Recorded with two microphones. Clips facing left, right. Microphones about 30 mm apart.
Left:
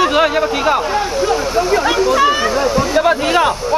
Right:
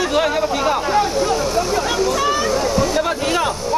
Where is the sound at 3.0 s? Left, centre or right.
Left.